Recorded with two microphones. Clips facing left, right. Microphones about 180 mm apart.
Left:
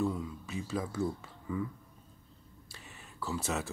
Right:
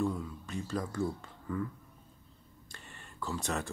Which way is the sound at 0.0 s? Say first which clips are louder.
Even; 5° left (ahead or behind).